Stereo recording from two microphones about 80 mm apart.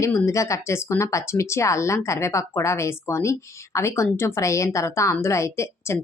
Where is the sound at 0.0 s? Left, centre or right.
Left.